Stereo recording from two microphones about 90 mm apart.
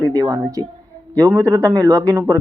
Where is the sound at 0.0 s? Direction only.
40° right (ahead or behind).